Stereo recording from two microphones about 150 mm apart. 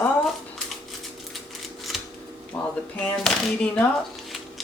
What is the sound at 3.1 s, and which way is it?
Speech, 5° left (ahead or behind).